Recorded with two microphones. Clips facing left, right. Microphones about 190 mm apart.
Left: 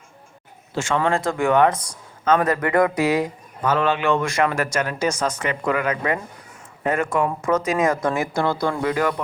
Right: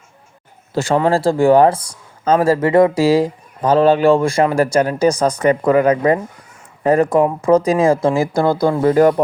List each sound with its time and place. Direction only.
0.7 s speech: 35° right (ahead or behind)